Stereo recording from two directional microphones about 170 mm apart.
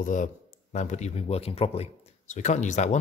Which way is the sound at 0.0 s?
50° left (ahead or behind).